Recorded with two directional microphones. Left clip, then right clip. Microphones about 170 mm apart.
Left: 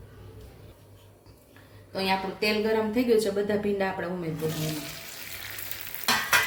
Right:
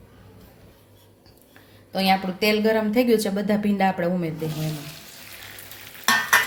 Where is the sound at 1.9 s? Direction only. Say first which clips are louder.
Right 6 dB; 65° right (ahead or behind).